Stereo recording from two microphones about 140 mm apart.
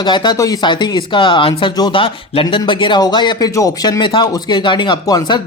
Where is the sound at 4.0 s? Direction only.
35° left (ahead or behind).